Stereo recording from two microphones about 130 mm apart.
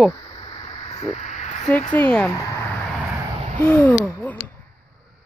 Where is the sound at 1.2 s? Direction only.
65° left (ahead or behind).